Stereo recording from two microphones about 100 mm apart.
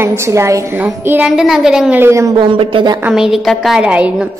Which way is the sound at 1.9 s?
25° right (ahead or behind).